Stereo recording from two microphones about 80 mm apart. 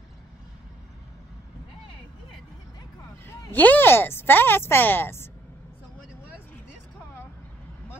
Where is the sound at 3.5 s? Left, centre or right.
Left.